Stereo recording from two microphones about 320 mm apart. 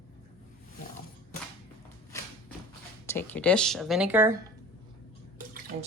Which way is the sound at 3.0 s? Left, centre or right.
Centre.